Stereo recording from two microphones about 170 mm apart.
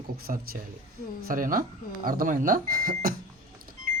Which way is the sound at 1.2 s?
55° right (ahead or behind).